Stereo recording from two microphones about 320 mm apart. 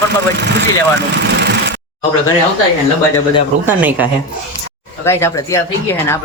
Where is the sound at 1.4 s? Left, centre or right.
Right.